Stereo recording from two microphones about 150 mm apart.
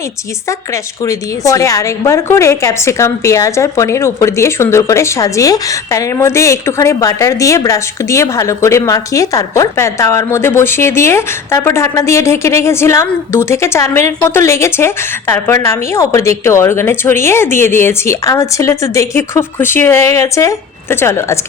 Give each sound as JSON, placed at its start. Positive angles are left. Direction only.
{"t": 0.4, "sound": "a woman's voice", "side_deg": 20}